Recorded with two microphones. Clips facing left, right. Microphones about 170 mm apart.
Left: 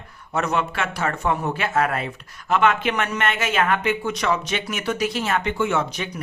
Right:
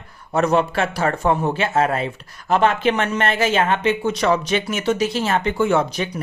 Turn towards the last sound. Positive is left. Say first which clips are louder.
# right 5 dB
turn(degrees=-35)  # may be behind; listen again after turning